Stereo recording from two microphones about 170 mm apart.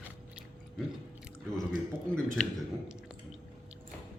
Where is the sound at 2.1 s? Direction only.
5° left (ahead or behind).